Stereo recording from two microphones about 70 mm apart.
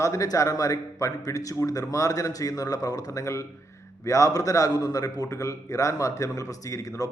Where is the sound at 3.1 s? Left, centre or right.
Left.